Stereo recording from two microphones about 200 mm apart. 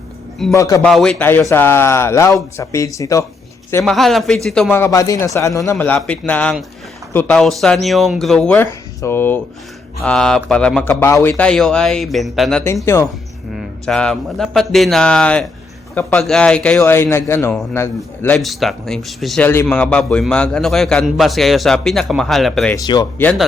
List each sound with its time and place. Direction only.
0.5 s a man's voice: 15° left (ahead or behind)
0.8 s a man's voice: centre (ahead or behind)
3.8 s a man's voice: centre (ahead or behind)
13.6 s a man's voice: 5° left (ahead or behind)
22.7 s a man's voice: 15° left (ahead or behind)
23.2 s a man's voice: 5° left (ahead or behind)